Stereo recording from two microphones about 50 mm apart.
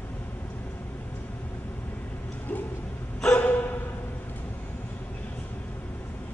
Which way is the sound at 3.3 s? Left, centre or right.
Left.